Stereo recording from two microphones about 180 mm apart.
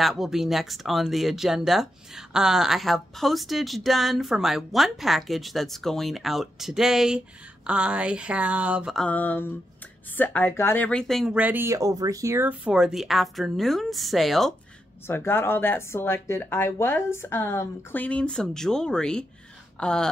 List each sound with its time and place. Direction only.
0.0 s speech: centre (ahead or behind)
15.0 s speech: 10° left (ahead or behind)